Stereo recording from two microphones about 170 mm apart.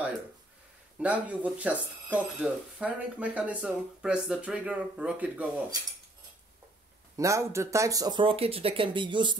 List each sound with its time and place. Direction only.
0.9 s speech: 10° right (ahead or behind)
7.2 s speech: 15° right (ahead or behind)